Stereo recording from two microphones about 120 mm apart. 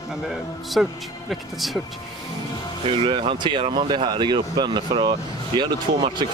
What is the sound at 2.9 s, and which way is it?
Speech, 45° right (ahead or behind).